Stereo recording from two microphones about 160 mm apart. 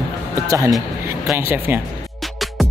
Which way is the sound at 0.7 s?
Centre (ahead or behind).